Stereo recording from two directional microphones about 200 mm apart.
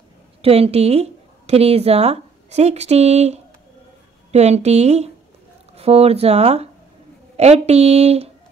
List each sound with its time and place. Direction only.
0.4 s speech: 30° right (ahead or behind)